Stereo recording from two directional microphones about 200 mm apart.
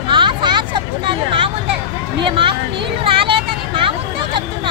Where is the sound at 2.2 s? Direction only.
25° right (ahead or behind).